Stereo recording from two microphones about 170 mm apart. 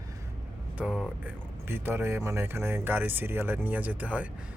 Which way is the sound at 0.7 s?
Centre (ahead or behind).